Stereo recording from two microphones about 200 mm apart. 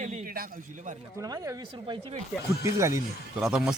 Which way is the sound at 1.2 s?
20° right (ahead or behind).